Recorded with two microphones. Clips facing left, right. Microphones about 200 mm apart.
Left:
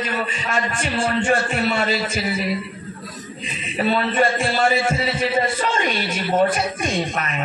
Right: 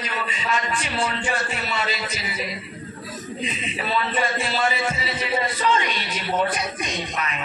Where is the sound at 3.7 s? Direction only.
50° left (ahead or behind).